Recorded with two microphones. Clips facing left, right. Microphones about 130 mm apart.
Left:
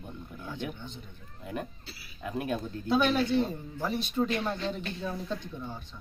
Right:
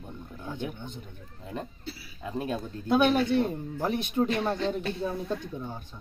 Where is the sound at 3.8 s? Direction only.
55° right (ahead or behind).